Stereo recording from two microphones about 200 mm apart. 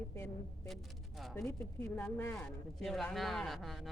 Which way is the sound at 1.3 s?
10° left (ahead or behind).